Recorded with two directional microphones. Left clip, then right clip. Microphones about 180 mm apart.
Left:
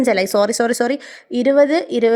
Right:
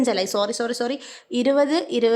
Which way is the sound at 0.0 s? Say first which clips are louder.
Left 6 dB; 30° left (ahead or behind).